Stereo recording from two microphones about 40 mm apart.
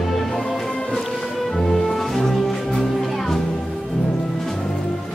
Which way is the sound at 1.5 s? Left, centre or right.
Centre.